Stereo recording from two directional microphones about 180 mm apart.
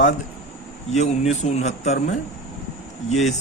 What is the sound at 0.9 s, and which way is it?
Speech, 40° left (ahead or behind).